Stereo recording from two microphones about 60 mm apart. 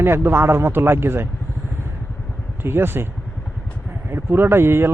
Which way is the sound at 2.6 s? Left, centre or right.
Right.